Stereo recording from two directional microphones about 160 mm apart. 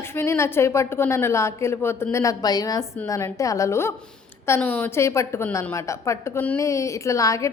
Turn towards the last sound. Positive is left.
turn(degrees=20)  # may be behind; listen again after turning